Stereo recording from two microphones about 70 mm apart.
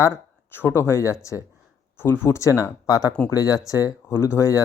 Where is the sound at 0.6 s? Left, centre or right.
Left.